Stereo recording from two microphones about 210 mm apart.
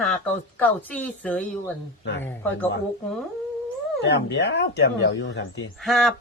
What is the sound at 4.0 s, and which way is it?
Speech, 55° left (ahead or behind).